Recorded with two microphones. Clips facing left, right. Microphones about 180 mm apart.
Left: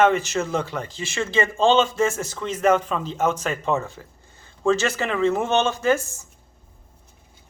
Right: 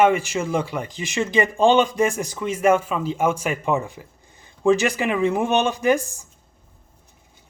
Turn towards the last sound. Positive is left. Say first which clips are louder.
# right 2 dB
turn(degrees=-15)  # may be behind; listen again after turning